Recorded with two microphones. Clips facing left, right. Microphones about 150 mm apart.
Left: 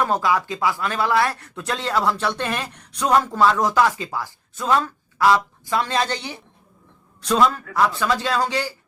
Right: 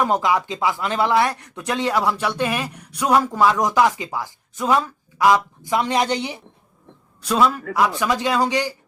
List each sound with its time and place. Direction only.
0.0 s speech: 20° right (ahead or behind)
7.2 s speech: 5° right (ahead or behind)